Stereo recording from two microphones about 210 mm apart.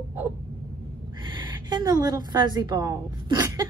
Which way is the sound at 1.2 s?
20° right (ahead or behind).